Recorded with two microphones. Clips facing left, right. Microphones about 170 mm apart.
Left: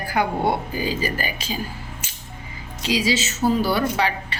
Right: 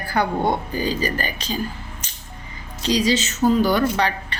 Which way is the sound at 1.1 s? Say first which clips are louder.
Right 1 dB; 10° left (ahead or behind).